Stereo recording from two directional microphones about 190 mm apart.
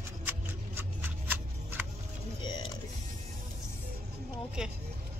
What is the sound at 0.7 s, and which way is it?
Shuffling cards, 10° right (ahead or behind).